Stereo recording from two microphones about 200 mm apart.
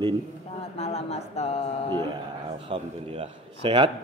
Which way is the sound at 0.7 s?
30° left (ahead or behind).